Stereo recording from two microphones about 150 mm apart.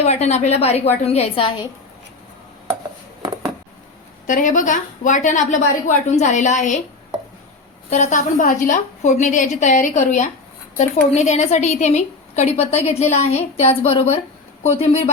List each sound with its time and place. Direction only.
0.0 s a woman's voice: 45° left (ahead or behind)
4.3 s a woman's voice: 60° left (ahead or behind)
7.9 s a woman's voice: 50° left (ahead or behind)